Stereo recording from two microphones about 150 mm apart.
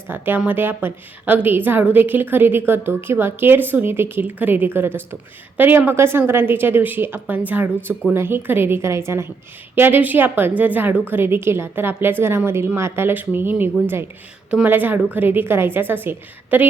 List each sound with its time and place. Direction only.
0.1 s a woman's voice: 10° right (ahead or behind)